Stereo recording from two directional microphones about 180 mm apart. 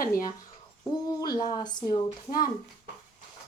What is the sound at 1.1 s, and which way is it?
Speech, 20° left (ahead or behind).